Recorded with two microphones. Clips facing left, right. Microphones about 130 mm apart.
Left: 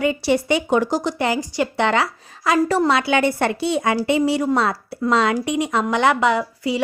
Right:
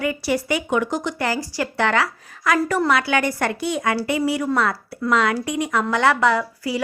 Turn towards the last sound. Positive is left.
turn(degrees=20)  # may be behind; listen again after turning